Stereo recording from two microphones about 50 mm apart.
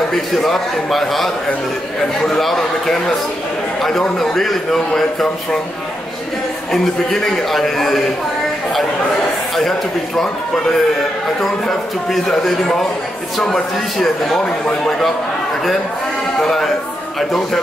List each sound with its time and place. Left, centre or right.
0.1 s a man's voice: centre
4.2 s a man's voice: centre
6.7 s a man's voice: centre
9.6 s a man's voice: centre
13.9 s a man's voice: centre
14.4 s speech: centre
16.3 s a man's voice: centre